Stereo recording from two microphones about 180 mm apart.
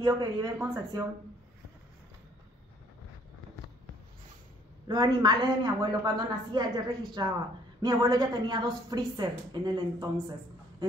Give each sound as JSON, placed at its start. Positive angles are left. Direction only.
{"t": 0.0, "sound": "a woman's voice", "side_deg": -20}
{"t": 4.8, "sound": "a woman's voice", "side_deg": -25}